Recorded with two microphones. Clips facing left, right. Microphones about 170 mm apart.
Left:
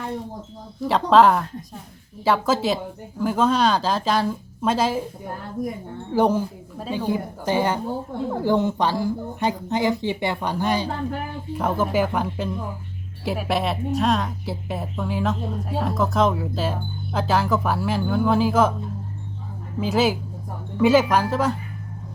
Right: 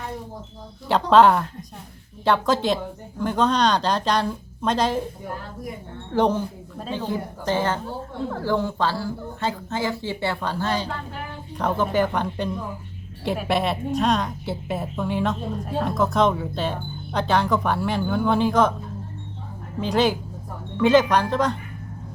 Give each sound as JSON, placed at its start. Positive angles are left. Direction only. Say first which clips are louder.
{"t": 0.9, "sound": "a woman's voice", "louder": "even", "side_deg": 0}
{"t": 6.1, "sound": "a woman's voice", "louder": "left 1 dB", "side_deg": 10}
{"t": 19.8, "sound": "a woman's voice", "louder": "even", "side_deg": 5}